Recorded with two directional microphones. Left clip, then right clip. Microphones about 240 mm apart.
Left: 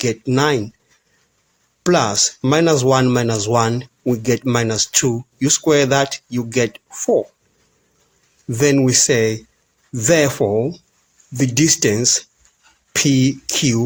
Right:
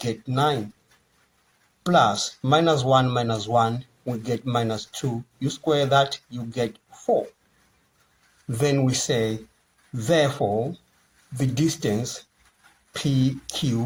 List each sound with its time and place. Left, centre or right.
0.0 s speech: left
1.8 s speech: left
8.5 s speech: left